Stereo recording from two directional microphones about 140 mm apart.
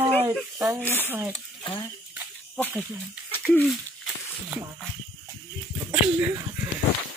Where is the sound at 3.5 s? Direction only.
Centre (ahead or behind).